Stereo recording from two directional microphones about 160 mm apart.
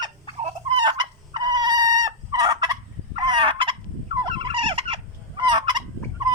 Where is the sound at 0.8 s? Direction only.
30° right (ahead or behind).